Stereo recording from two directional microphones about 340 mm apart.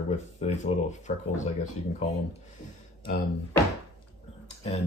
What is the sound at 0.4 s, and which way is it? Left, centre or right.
Speech, centre.